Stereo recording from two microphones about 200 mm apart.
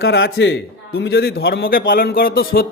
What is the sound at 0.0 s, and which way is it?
Speech, 75° left (ahead or behind).